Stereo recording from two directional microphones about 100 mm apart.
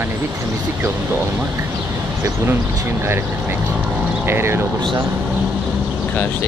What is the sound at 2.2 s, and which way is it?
Speech, 25° right (ahead or behind).